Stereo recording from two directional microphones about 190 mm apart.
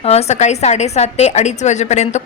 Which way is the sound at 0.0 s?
35° left (ahead or behind).